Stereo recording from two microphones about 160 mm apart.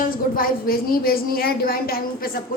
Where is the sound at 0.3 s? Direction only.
65° left (ahead or behind).